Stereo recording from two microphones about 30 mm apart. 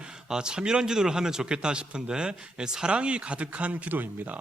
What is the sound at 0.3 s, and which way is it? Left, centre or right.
Speech, right.